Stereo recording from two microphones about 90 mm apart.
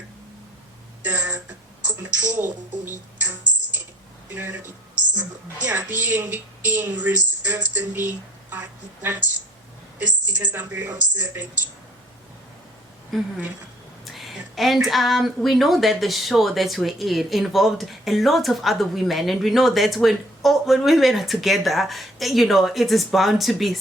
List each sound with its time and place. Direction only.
1.0 s a sound: 20° right (ahead or behind)
1.8 s speech: 15° right (ahead or behind)
4.4 s a woman's voice: 20° right (ahead or behind)
10.2 s speech: 15° right (ahead or behind)
13.1 s speech: centre (ahead or behind)